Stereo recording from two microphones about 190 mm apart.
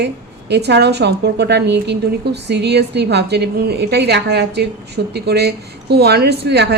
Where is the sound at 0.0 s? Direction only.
60° right (ahead or behind).